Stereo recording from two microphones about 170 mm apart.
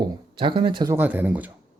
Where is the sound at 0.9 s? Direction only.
10° right (ahead or behind).